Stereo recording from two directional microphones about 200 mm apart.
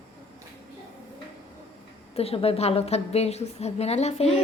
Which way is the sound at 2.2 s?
30° left (ahead or behind).